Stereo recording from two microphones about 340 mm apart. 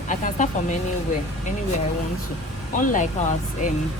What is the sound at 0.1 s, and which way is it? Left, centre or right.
Speech, left.